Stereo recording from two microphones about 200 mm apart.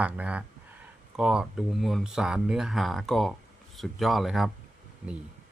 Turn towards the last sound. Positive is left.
turn(degrees=0)  # may be behind; listen again after turning